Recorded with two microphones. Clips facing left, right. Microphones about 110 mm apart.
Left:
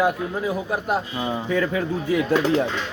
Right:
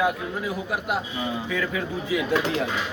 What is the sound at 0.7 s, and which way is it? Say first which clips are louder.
Speech: left 3 dB; 40° left (ahead or behind).